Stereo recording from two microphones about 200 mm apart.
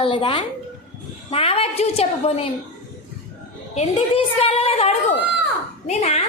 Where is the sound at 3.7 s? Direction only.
30° left (ahead or behind).